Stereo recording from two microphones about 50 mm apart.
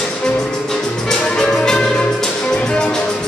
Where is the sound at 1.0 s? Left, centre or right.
Centre.